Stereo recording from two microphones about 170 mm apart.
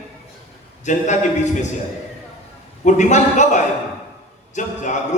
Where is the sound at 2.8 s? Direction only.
45° left (ahead or behind).